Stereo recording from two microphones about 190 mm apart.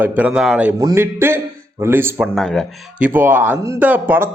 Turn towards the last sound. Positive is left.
turn(degrees=-10)  # may be behind; listen again after turning